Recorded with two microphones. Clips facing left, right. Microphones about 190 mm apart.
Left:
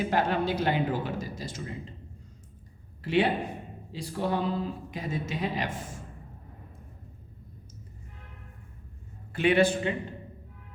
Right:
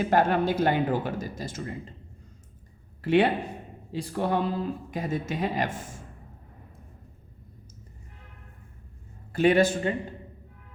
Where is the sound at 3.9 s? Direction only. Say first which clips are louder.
Right 3 dB; 55° right (ahead or behind).